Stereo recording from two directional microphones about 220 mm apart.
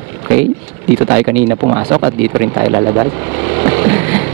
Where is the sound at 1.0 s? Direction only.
15° right (ahead or behind).